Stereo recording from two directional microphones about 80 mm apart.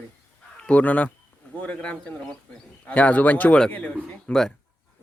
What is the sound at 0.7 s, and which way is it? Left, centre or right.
Speech, centre.